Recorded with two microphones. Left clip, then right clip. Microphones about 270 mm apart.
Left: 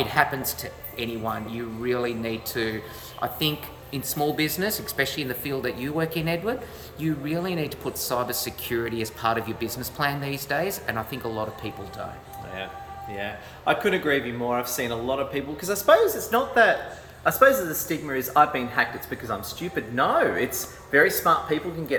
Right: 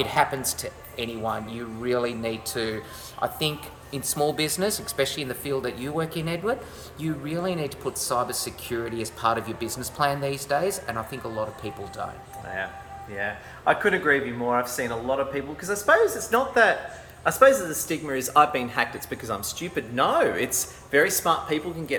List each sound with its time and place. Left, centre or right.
0.0 s speech: centre
13.1 s speech: centre
18.3 s speech: centre